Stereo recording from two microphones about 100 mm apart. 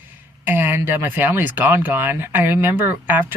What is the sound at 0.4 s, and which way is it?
Speech, 20° right (ahead or behind).